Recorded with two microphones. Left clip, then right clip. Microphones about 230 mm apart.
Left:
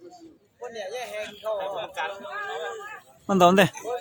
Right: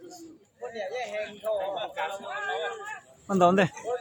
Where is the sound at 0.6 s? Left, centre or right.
Left.